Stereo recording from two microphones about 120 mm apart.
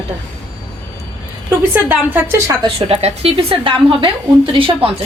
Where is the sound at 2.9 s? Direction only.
55° right (ahead or behind).